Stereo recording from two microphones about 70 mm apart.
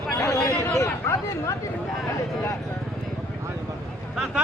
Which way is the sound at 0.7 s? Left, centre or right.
Left.